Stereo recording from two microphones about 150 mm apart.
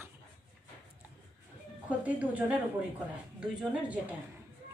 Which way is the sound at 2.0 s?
10° right (ahead or behind).